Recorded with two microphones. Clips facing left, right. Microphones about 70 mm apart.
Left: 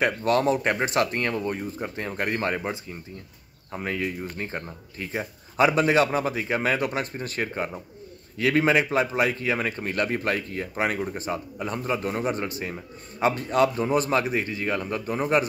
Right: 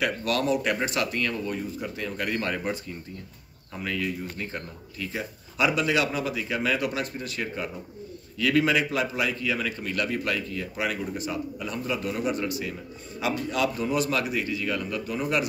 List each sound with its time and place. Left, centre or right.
0.0 s a man's voice: left